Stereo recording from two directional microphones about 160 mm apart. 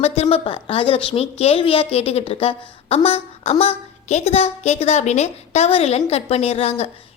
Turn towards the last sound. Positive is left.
turn(degrees=40)  # may be behind; listen again after turning